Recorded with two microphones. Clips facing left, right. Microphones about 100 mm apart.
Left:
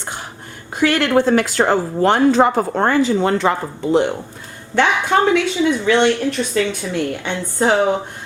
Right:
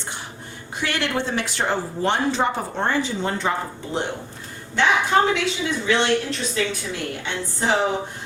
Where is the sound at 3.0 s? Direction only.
80° left.